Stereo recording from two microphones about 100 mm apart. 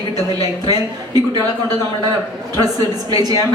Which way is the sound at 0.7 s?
40° right (ahead or behind).